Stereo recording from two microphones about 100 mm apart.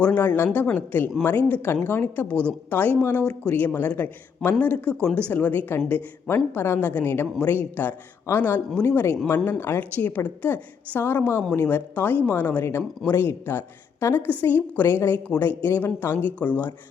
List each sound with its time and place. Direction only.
0.0 s speech: 15° left (ahead or behind)